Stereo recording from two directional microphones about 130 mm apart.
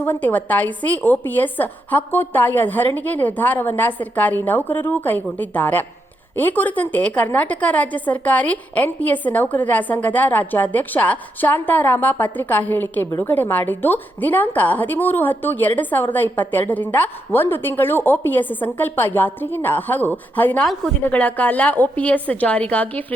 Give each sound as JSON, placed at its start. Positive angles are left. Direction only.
{"t": 0.0, "sound": "a woman's voice", "side_deg": 15}